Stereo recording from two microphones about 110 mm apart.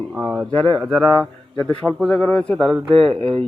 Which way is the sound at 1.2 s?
10° left (ahead or behind).